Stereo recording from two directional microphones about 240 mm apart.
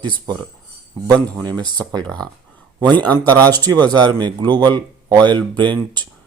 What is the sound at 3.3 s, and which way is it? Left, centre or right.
Speech, centre.